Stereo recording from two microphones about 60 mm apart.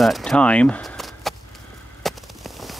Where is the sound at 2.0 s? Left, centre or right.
Centre.